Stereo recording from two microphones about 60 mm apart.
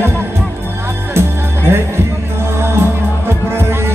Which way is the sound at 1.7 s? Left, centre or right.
Right.